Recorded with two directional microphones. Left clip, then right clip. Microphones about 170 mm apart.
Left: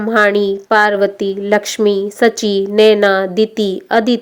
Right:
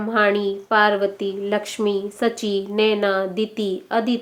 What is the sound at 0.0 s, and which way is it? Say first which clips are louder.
Speech: left 7 dB; 50° left (ahead or behind).